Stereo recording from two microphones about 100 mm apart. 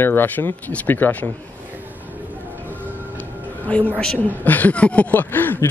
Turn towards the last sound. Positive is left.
turn(degrees=20)  # may be behind; listen again after turning